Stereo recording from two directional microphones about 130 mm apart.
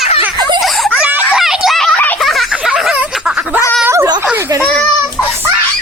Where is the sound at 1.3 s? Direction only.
5° right (ahead or behind).